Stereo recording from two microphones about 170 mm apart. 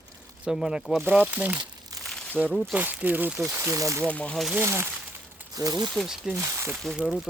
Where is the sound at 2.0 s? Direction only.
5° left (ahead or behind).